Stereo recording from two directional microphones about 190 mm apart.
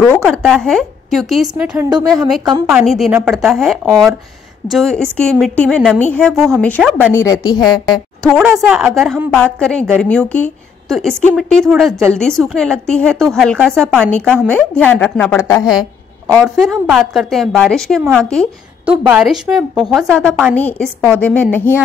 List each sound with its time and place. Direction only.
0.0 s a woman's voice: 5° left (ahead or behind)
2.9 s a woman's voice: centre (ahead or behind)
7.2 s speech: 20° left (ahead or behind)
8.5 s a woman's voice: 10° right (ahead or behind)
8.7 s a woman's voice: centre (ahead or behind); by 15.6 s 15° left (ahead or behind)
16.3 s a woman's voice: 5° left (ahead or behind)